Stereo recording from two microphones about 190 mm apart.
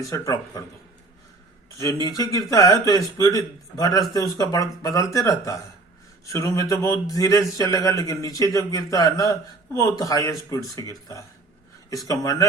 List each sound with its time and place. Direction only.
0.0 s a man's voice: 15° left (ahead or behind)
1.8 s a man's voice: 20° left (ahead or behind)